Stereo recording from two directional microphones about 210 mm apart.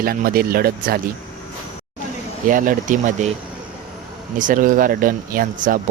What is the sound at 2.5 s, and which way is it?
Speech, 40° right (ahead or behind).